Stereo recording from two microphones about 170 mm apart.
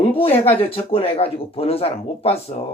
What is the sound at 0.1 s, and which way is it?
Speech, 35° left (ahead or behind).